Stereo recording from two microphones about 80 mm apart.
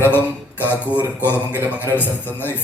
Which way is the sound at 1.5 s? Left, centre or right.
Right.